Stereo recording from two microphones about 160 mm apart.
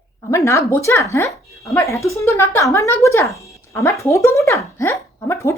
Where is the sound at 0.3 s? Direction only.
20° left (ahead or behind).